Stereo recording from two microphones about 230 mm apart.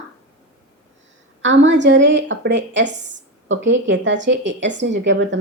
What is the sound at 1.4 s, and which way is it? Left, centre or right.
A woman's voice, right.